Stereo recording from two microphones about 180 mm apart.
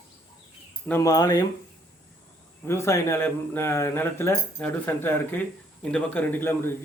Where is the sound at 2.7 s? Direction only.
15° left (ahead or behind).